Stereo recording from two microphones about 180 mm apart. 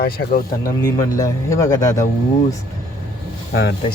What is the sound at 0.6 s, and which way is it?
A man's voice, 20° left (ahead or behind).